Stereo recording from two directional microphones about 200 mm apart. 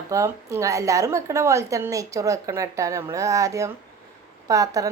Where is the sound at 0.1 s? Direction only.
15° right (ahead or behind).